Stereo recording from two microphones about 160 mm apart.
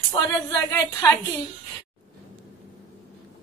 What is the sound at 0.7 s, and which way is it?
Speech, 15° left (ahead or behind).